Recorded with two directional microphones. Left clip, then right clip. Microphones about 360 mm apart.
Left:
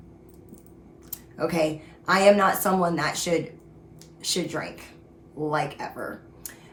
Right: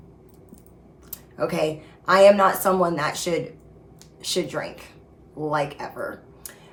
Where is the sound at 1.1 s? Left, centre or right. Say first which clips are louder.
Right 1 dB; centre.